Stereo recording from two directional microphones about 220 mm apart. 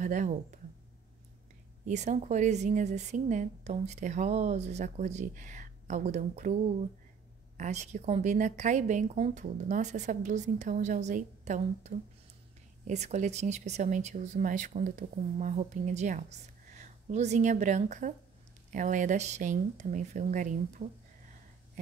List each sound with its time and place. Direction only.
0.0 s speech: 35° right (ahead or behind)
1.9 s speech: 30° right (ahead or behind)
7.5 s speech: 30° right (ahead or behind)